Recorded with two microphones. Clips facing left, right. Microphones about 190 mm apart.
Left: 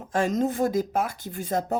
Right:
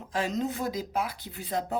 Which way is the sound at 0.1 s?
50° left (ahead or behind).